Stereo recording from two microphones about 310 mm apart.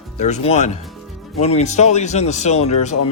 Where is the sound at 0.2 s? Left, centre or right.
Left.